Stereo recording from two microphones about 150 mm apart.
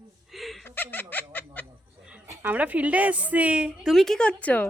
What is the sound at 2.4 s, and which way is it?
A woman's voice, 10° right (ahead or behind).